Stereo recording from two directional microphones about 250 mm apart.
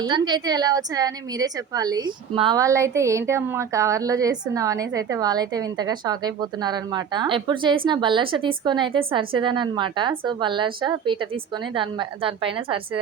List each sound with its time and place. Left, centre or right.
0.0 s a woman's voice: centre